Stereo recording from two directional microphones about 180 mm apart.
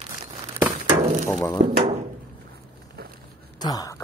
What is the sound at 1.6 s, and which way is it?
Speech, 45° right (ahead or behind).